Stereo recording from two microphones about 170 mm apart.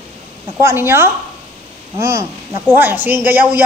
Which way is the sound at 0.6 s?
15° right (ahead or behind).